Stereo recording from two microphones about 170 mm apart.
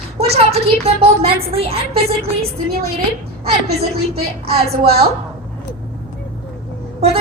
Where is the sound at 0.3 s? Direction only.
35° right (ahead or behind).